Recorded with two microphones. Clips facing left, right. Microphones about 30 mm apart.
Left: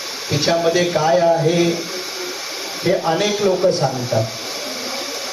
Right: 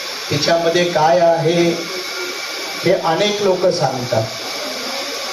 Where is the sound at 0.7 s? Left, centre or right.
Right.